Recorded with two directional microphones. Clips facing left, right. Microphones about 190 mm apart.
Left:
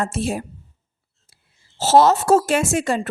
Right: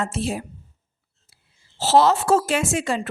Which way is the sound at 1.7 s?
45° left (ahead or behind).